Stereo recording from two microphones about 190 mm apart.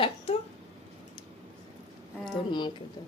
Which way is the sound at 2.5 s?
25° left (ahead or behind).